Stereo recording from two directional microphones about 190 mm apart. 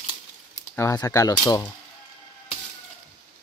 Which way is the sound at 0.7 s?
15° left (ahead or behind).